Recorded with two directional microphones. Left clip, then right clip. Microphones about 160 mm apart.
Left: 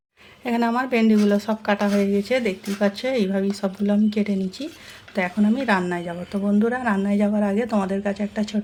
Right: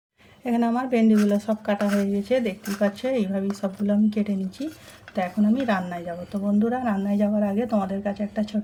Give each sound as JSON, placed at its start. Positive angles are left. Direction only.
{"t": 0.4, "sound": "a woman's voice", "side_deg": 10}